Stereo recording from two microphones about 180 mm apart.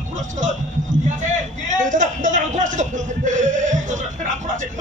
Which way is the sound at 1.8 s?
45° right (ahead or behind).